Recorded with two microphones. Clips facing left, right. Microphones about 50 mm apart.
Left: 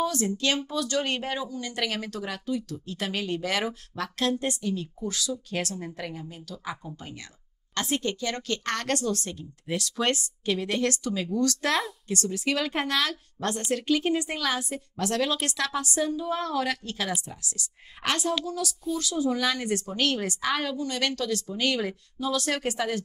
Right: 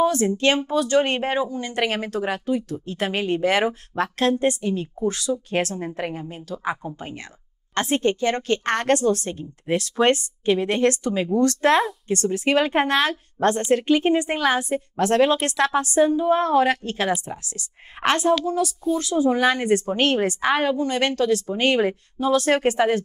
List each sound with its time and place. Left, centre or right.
0.0 s speech: right